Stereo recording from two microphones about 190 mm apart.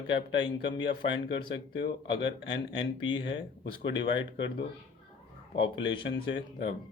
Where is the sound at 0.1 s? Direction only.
75° left (ahead or behind).